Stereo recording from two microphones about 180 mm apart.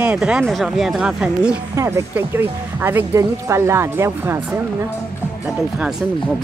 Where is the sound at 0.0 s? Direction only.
5° right (ahead or behind).